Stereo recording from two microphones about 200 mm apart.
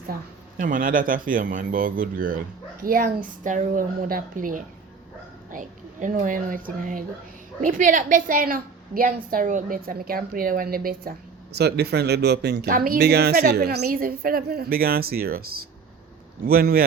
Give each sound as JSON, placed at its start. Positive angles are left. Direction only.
{"t": 0.1, "sound": "speech", "side_deg": -45}
{"t": 16.5, "sound": "speech", "side_deg": -50}